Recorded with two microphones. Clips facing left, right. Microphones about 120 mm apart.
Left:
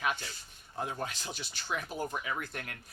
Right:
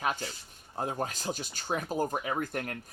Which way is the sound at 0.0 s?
35° right (ahead or behind).